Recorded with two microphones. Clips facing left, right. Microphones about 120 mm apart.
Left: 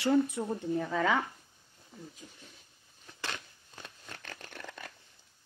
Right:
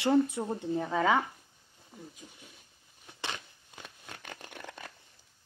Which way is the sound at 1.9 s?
10° right (ahead or behind).